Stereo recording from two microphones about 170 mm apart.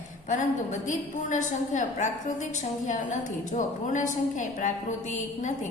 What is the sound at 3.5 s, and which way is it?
A woman's voice, 45° left (ahead or behind).